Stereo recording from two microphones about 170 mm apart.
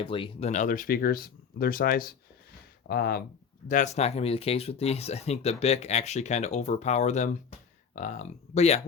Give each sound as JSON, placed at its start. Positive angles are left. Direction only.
{"t": 0.0, "sound": "speech", "side_deg": 30}
{"t": 3.7, "sound": "speech", "side_deg": 45}